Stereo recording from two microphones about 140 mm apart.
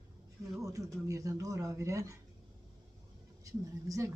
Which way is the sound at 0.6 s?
25° right (ahead or behind).